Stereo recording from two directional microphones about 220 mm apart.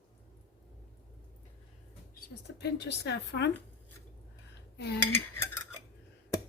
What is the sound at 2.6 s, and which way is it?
Speech, 50° left (ahead or behind).